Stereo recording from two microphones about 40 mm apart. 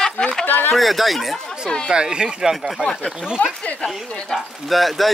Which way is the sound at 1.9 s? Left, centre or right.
Right.